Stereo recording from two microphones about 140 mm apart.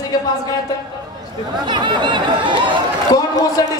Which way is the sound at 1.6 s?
35° right (ahead or behind).